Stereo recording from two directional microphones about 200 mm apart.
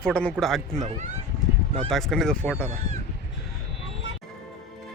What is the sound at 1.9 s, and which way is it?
Speech, centre (ahead or behind).